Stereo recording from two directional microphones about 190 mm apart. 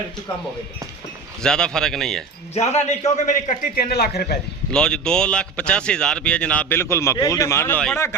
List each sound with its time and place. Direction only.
1.4 s speech: 5° left (ahead or behind)
2.6 s a man's voice: 35° left (ahead or behind); by 4.4 s 55° left (ahead or behind)
4.7 s speech: 5° left (ahead or behind)